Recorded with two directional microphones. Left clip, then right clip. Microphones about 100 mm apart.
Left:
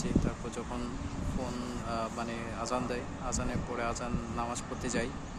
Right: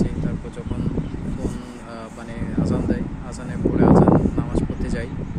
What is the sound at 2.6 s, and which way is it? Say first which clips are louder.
Speech: right 9 dB; 50° left (ahead or behind).